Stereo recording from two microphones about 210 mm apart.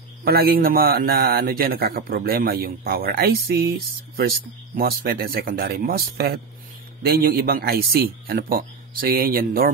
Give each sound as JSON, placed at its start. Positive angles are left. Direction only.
{"t": 0.2, "sound": "a man's voice", "side_deg": -45}